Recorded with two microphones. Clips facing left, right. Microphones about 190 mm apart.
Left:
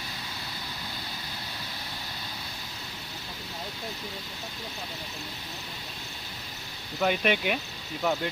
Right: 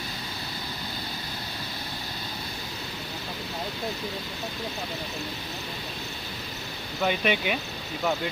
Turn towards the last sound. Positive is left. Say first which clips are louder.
# even
turn(degrees=0)  # may be behind; listen again after turning